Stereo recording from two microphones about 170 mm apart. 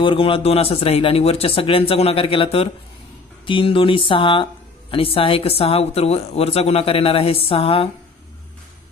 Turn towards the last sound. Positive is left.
turn(degrees=35)  # may be behind; listen again after turning